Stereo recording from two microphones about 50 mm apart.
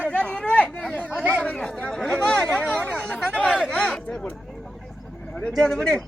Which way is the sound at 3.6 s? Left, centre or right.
Centre.